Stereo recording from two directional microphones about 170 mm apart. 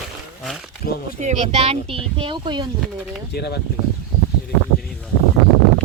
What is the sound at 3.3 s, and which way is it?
Speech, 70° left (ahead or behind).